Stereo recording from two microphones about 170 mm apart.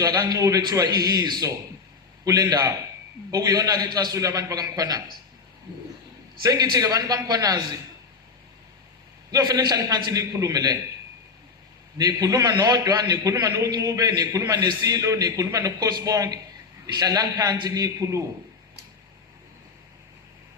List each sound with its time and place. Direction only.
0.0 s a man's voice: 20° right (ahead or behind)
6.4 s a man's voice: 20° right (ahead or behind)
9.3 s a man's voice: 20° right (ahead or behind)
11.9 s a man's voice: 20° right (ahead or behind)